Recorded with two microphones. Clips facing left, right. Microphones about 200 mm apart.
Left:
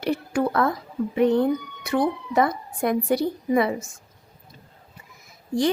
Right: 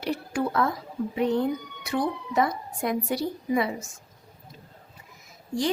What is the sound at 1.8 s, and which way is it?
A woman's voice, 55° left (ahead or behind).